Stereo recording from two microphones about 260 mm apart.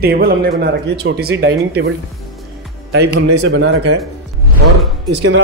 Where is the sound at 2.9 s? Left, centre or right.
Right.